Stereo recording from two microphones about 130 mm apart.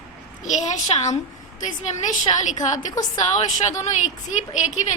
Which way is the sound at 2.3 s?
40° left (ahead or behind).